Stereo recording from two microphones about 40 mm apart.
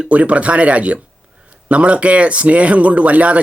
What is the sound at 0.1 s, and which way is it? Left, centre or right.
Speech, right.